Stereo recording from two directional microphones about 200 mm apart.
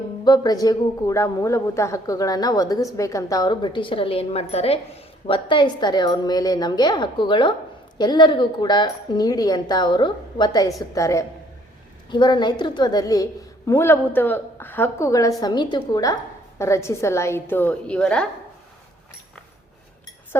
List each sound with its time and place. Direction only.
0.3 s a woman's voice: 20° left (ahead or behind)